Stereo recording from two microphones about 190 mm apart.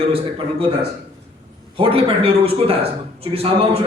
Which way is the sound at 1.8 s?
30° right (ahead or behind).